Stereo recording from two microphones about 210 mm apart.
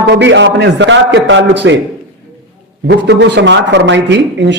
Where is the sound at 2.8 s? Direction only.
55° right (ahead or behind).